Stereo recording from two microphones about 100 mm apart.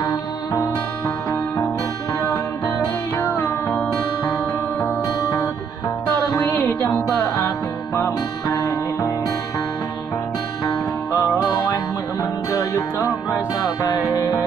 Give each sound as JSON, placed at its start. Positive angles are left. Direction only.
{"t": 0.6, "sound": "music", "side_deg": 30}
{"t": 3.2, "sound": "music", "side_deg": 20}
{"t": 5.0, "sound": "music", "side_deg": 30}
{"t": 6.5, "sound": "music", "side_deg": 15}
{"t": 8.5, "sound": "music", "side_deg": 35}
{"t": 10.6, "sound": "music", "side_deg": 30}
{"t": 13.7, "sound": "music", "side_deg": 35}